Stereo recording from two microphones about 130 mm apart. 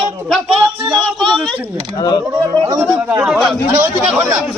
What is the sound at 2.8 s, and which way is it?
Speech, 15° right (ahead or behind).